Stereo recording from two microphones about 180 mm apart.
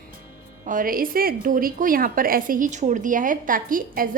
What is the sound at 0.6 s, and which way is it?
A woman's voice, 50° right (ahead or behind).